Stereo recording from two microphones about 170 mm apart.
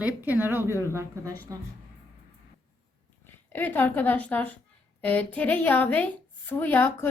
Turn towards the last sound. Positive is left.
turn(degrees=10)  # may be behind; listen again after turning